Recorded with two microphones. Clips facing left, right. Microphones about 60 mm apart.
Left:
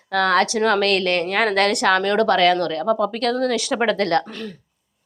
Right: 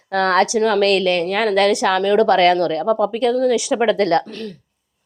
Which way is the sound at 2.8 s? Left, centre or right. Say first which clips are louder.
Right 1 dB; centre.